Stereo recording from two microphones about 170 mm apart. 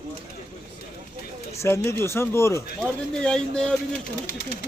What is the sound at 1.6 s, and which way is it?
Speech, 15° left (ahead or behind).